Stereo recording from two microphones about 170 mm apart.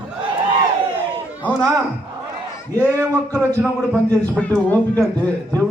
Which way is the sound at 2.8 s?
15° right (ahead or behind).